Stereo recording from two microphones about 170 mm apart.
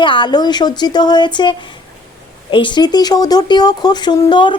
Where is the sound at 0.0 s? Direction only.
30° left (ahead or behind).